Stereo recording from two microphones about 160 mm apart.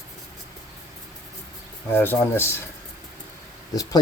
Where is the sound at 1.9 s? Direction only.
15° left (ahead or behind).